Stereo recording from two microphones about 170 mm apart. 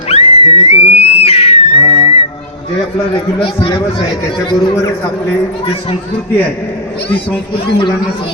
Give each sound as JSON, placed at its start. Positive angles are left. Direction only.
{"t": 0.1, "sound": "a sound", "side_deg": 40}
{"t": 0.9, "sound": "whistle", "side_deg": 35}
{"t": 3.4, "sound": "a man's voice", "side_deg": 30}
{"t": 7.5, "sound": "a man's voice", "side_deg": 30}